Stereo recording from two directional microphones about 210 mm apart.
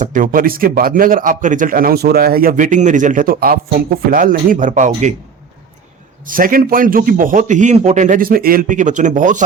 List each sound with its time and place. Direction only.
0.0 s a man's voice: 40° right (ahead or behind)
6.2 s a man's voice: 40° right (ahead or behind)